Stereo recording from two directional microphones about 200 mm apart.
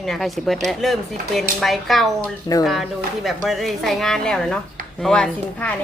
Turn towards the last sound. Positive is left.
turn(degrees=5)  # may be behind; listen again after turning